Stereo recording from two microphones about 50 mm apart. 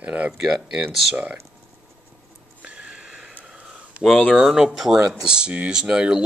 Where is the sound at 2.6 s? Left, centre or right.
Centre.